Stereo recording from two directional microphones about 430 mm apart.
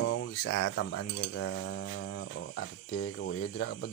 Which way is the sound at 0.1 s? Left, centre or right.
Left.